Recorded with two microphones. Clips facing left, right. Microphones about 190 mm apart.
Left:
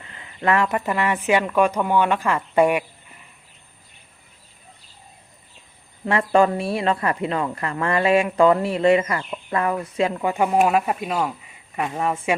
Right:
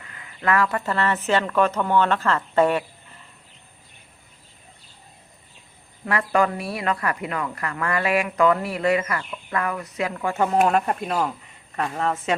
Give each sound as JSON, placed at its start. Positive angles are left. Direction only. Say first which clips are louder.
{"t": 0.0, "sound": "speech", "louder": "left 3 dB", "side_deg": 25}
{"t": 6.1, "sound": "a woman's voice", "louder": "left 4 dB", "side_deg": 25}
{"t": 10.3, "sound": "speech", "louder": "even", "side_deg": 10}